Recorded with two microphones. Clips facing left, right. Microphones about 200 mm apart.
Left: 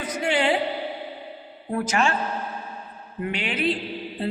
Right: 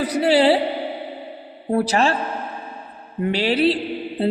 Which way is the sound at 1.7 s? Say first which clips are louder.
Right 5 dB; 35° right (ahead or behind).